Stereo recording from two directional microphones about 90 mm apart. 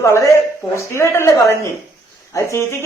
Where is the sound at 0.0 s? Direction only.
35° left (ahead or behind).